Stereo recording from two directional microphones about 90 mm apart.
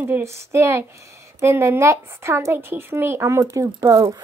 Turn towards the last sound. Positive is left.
turn(degrees=-40)  # may be behind; listen again after turning